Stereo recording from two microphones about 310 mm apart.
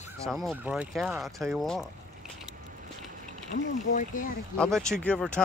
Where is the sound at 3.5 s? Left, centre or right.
Left.